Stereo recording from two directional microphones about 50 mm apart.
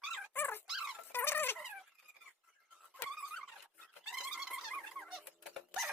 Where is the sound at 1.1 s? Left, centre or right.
Left.